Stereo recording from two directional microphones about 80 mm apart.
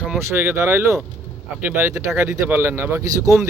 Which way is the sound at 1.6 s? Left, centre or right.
Right.